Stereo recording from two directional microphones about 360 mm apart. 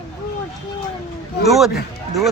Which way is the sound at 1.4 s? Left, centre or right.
Centre.